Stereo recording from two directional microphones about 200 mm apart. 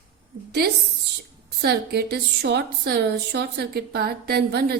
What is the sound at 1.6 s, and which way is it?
A woman's voice, 55° right (ahead or behind).